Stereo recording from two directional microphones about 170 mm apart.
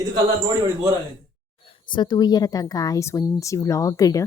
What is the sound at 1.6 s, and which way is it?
Speech, 30° left (ahead or behind).